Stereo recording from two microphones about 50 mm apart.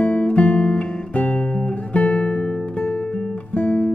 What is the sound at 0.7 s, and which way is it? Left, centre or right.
Guitar, centre.